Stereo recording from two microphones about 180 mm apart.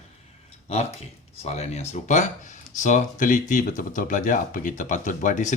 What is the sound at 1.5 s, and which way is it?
Speech, 35° left (ahead or behind).